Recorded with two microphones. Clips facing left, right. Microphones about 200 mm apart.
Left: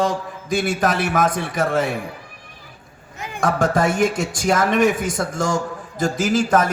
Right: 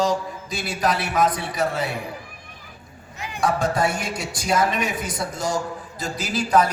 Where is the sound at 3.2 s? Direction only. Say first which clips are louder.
Left 2 dB; 50° left (ahead or behind).